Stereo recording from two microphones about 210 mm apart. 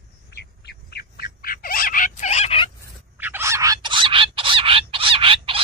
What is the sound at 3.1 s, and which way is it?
Fowl, 10° right (ahead or behind).